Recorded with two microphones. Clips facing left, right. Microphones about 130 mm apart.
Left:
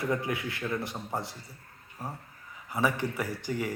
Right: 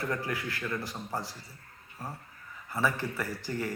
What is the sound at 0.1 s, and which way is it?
A man's voice, 20° left (ahead or behind).